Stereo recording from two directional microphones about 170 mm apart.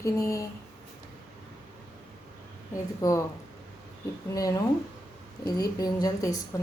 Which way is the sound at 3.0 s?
20° left (ahead or behind).